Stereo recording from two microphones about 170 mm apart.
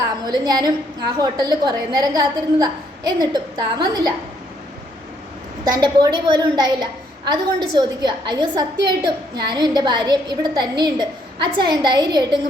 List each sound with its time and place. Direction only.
0.0 s a woman's voice: 25° right (ahead or behind)
5.6 s a woman's voice: 25° right (ahead or behind)